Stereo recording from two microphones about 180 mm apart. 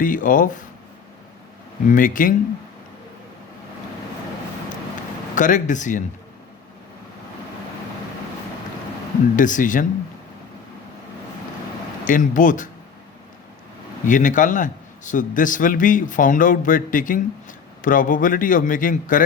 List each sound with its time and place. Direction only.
0.0 s a man's voice: 50° left (ahead or behind)
1.9 s a man's voice: 50° left (ahead or behind)
5.3 s a man's voice: 45° left (ahead or behind)
9.3 s a man's voice: 45° left (ahead or behind)
12.0 s a man's voice: 45° left (ahead or behind)
14.0 s a man's voice: 45° left (ahead or behind)